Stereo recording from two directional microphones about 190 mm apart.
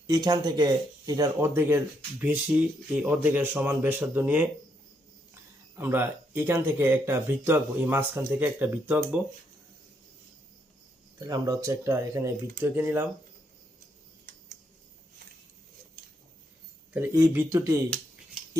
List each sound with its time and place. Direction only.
0.1 s speech: 20° right (ahead or behind)
11.2 s speech: 20° right (ahead or behind)
16.9 s speech: 10° right (ahead or behind)